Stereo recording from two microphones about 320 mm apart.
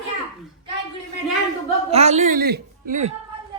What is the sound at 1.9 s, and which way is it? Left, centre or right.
Speech, centre.